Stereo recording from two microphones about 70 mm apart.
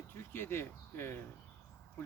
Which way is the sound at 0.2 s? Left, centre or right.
Left.